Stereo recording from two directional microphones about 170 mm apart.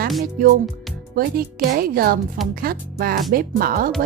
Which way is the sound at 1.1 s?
60° right (ahead or behind).